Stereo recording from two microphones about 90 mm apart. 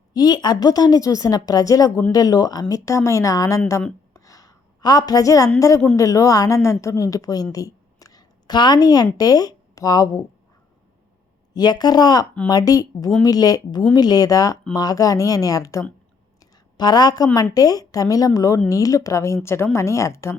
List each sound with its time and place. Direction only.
0.1 s a woman's voice: 45° left (ahead or behind)
4.1 s a sound: 40° left (ahead or behind)
5.5 s a woman's voice: 40° left (ahead or behind)
7.5 s a sound: 40° left (ahead or behind)
9.1 s speech: 45° left (ahead or behind)
11.5 s a woman's voice: 50° left (ahead or behind)
16.7 s a woman's voice: 50° left (ahead or behind); by 20.3 s 30° left (ahead or behind)